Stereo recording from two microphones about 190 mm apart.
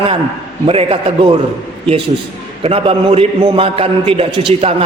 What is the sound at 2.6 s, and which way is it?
A man's voice, 30° right (ahead or behind).